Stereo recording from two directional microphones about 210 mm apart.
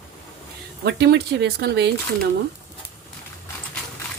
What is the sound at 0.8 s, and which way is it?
Speech, 55° right (ahead or behind).